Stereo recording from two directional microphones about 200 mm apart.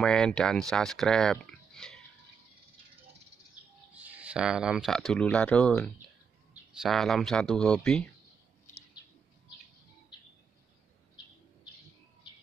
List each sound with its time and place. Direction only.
0.0 s speech: 5° left (ahead or behind)
3.9 s speech: 5° right (ahead or behind)
12.2 s bird: 20° left (ahead or behind)